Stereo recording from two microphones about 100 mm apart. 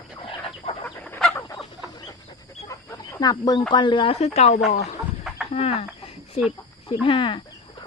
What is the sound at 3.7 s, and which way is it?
Speech, 55° left (ahead or behind).